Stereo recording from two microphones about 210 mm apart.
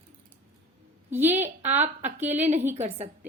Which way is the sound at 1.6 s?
35° right (ahead or behind).